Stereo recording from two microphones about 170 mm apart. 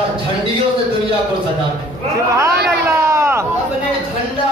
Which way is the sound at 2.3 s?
15° right (ahead or behind).